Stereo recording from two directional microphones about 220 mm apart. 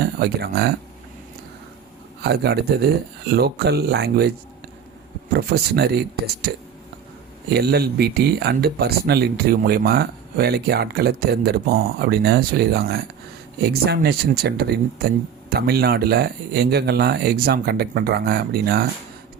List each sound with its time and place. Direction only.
0.0 s speech: 45° right (ahead or behind)
2.2 s speech: 45° right (ahead or behind)
5.3 s speech: 45° right (ahead or behind)
7.5 s speech: 45° right (ahead or behind)